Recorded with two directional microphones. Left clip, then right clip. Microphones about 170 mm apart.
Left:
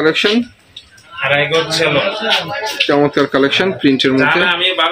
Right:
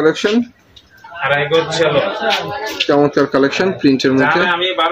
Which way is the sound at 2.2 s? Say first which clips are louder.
Left 1 dB; 60° right (ahead or behind).